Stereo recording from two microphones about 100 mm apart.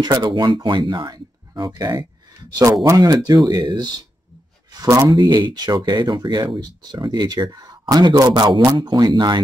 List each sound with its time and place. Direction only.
0.0 s speech: 50° right (ahead or behind)
4.7 s speech: 30° right (ahead or behind)
5.2 s speech: 45° right (ahead or behind)